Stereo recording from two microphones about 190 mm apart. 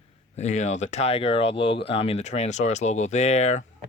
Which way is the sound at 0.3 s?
40° left (ahead or behind).